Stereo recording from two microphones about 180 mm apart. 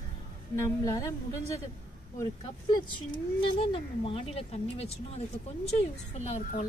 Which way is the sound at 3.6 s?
30° left (ahead or behind).